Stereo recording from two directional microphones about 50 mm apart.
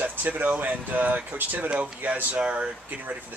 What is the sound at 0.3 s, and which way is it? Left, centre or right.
Speech, right.